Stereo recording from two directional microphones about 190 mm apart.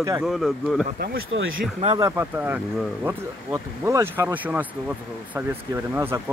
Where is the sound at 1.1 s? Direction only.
90° right.